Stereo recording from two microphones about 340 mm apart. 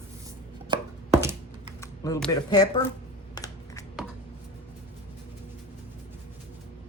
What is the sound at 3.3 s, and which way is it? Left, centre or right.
Computer keyboard, centre.